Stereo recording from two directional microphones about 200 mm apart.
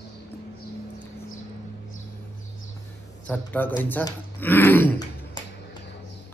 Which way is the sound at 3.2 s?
5° left (ahead or behind).